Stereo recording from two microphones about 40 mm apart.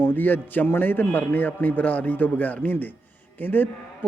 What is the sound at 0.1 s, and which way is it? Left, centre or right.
A man's voice, left.